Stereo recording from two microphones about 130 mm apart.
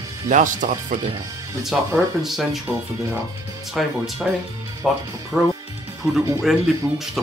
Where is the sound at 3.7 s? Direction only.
Centre (ahead or behind).